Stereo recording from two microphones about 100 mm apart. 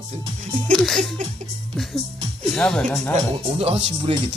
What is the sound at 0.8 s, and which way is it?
Speech, 5° left (ahead or behind).